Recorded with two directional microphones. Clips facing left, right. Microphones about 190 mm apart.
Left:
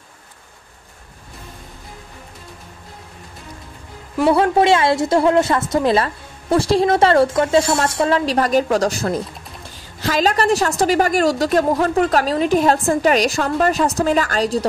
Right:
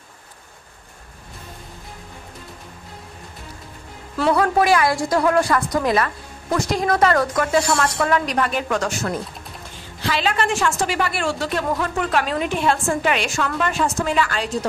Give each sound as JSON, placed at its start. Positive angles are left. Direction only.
{"t": 4.3, "sound": "a woman's voice", "side_deg": 25}